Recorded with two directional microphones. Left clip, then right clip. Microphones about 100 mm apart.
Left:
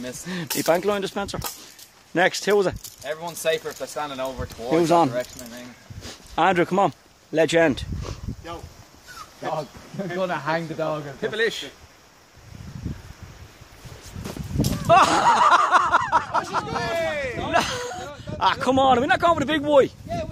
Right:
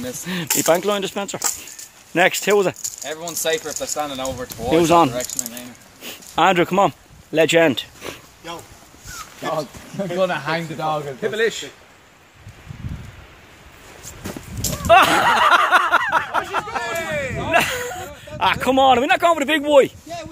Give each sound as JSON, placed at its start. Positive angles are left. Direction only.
{"t": 0.2, "sound": "speech", "side_deg": 5}
{"t": 0.6, "sound": "speech", "side_deg": 25}
{"t": 8.0, "sound": "a sound", "side_deg": 5}
{"t": 10.1, "sound": "speech", "side_deg": 0}
{"t": 11.1, "sound": "speech", "side_deg": 35}
{"t": 14.9, "sound": "a sound", "side_deg": 15}
{"t": 16.6, "sound": "speech", "side_deg": 35}
{"t": 19.3, "sound": "speech", "side_deg": 40}